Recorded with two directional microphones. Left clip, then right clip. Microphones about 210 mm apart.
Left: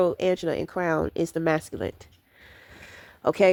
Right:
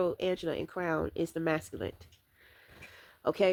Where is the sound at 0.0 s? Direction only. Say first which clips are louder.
Left 8 dB; 35° left (ahead or behind).